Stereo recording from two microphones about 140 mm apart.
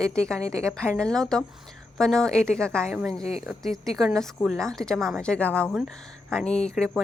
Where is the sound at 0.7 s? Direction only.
5° left (ahead or behind).